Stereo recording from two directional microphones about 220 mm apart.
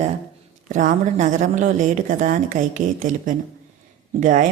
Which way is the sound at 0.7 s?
35° right (ahead or behind).